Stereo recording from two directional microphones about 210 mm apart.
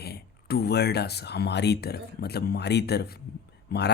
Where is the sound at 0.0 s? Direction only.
50° left (ahead or behind).